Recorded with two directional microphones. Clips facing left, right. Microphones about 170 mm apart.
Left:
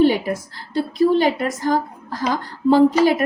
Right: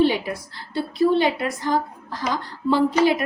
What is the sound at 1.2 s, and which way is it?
A woman's voice, 45° left (ahead or behind).